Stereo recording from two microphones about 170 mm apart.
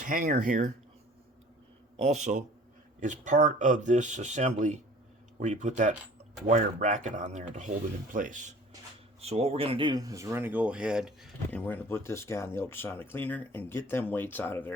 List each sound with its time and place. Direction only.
0.0 s speech: 50° right (ahead or behind)
2.0 s speech: 40° right (ahead or behind)
9.2 s speech: 40° right (ahead or behind); by 11.3 s 5° right (ahead or behind)
11.5 s speech: 10° left (ahead or behind)